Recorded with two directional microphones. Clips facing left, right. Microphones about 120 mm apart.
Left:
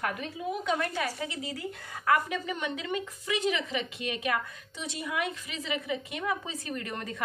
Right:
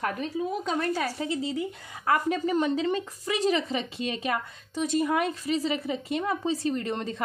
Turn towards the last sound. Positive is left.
turn(degrees=-30)  # may be behind; listen again after turning